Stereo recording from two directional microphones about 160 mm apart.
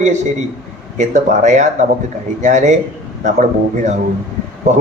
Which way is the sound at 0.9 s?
50° right (ahead or behind).